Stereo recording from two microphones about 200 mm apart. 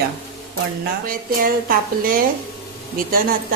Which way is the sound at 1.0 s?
45° right (ahead or behind).